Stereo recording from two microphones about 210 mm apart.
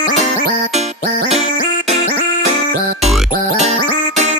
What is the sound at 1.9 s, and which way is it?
Music, 30° right (ahead or behind).